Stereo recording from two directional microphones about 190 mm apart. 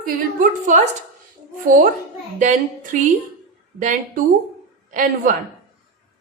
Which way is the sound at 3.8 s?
40° right (ahead or behind).